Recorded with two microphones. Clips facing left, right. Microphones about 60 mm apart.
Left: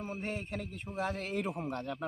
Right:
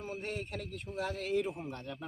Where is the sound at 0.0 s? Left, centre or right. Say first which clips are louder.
Left 1 dB; left.